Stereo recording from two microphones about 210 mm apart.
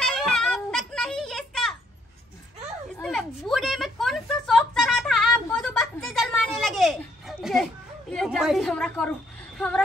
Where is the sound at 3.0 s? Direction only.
Centre (ahead or behind).